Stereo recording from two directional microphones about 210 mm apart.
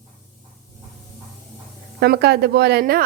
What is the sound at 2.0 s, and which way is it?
A woman's voice, 50° right (ahead or behind).